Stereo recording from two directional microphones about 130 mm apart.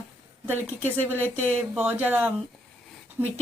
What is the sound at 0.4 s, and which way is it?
A woman's voice, 15° right (ahead or behind).